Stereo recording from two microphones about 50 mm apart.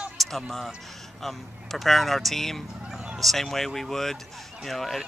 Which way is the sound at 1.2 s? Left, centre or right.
Centre.